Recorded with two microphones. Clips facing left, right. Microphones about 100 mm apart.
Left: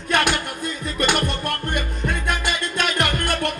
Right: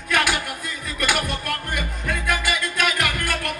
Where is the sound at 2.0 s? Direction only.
25° left (ahead or behind).